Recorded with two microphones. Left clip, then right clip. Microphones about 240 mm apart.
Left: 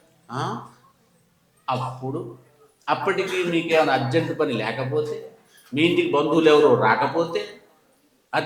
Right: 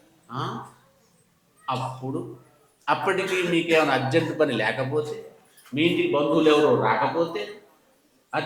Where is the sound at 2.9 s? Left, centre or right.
Centre.